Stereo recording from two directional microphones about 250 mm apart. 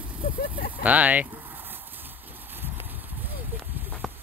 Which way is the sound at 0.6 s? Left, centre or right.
Left.